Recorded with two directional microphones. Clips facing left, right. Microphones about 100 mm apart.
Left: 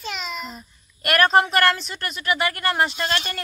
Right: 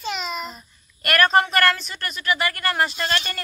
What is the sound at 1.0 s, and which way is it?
Speech, 20° left (ahead or behind).